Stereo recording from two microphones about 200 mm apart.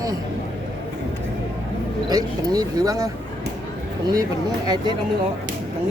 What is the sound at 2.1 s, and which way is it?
Speech, 20° right (ahead or behind).